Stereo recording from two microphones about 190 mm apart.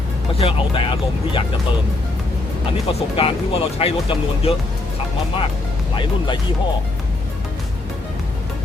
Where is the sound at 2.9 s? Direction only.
30° left (ahead or behind).